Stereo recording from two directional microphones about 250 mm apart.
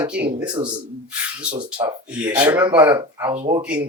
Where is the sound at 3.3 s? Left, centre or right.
Right.